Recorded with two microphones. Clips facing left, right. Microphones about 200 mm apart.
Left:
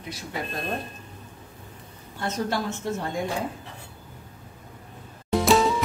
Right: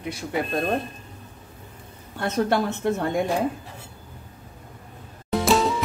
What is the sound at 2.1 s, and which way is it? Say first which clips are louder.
Speech: right 5 dB; 60° right (ahead or behind).